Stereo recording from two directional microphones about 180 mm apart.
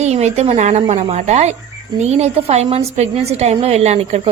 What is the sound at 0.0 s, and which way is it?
A woman's voice, 40° right (ahead or behind).